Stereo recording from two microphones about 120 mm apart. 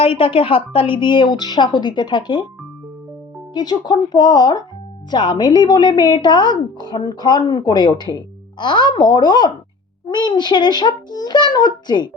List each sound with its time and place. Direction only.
0.0 s a woman's voice: 50° left (ahead or behind)
3.5 s a woman's voice: 35° left (ahead or behind)